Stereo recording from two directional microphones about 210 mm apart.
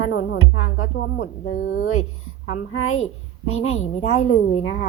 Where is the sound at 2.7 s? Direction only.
75° left (ahead or behind).